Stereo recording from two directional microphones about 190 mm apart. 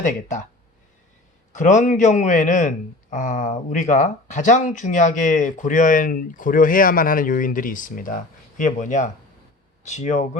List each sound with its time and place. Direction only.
0.0 s speech: 40° left (ahead or behind)
1.5 s a man's voice: 40° left (ahead or behind)